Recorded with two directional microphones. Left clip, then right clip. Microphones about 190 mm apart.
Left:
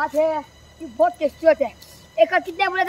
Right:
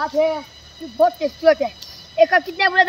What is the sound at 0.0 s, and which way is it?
Speech, 20° left (ahead or behind).